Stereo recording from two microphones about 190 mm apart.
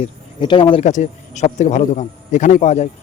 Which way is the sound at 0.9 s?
40° left (ahead or behind).